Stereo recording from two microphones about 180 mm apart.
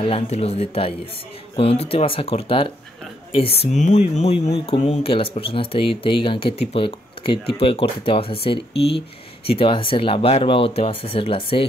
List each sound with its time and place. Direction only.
0.0 s speech: 30° left (ahead or behind)